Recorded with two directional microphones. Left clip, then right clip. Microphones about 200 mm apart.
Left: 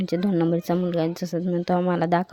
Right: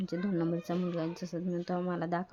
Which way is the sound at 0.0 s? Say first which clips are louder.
Left 10 dB; 40° left (ahead or behind).